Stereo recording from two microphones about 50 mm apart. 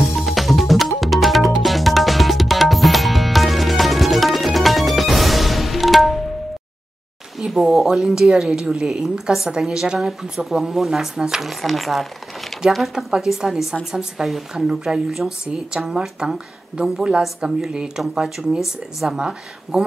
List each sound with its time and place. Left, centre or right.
0.1 s music: centre
7.3 s a sound: centre
7.7 s a woman's voice: centre
11.6 s a woman's voice: centre
17.6 s a woman's voice: centre